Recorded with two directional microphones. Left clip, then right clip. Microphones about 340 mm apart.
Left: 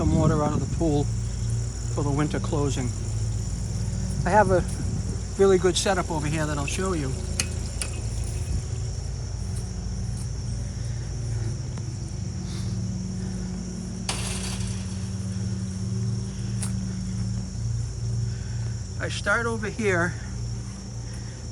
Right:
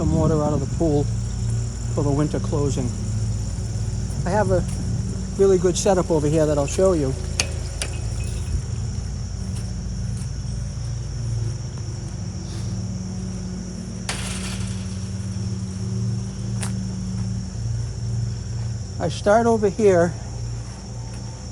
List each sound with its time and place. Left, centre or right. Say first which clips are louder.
0.0 s speech: right 3 dB; centre
4.2 s speech: left 1 dB; centre
18.9 s speech: right 7 dB; centre